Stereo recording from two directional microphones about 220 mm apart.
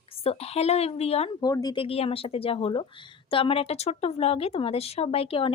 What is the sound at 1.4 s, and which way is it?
A woman's voice, 15° left (ahead or behind).